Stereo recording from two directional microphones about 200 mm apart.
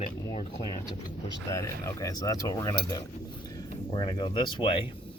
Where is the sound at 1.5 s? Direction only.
15° left (ahead or behind).